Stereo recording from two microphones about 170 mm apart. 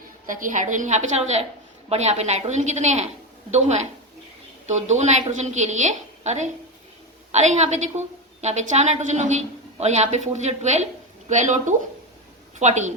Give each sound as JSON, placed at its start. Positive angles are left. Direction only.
{"t": 0.3, "sound": "a woman's voice", "side_deg": -50}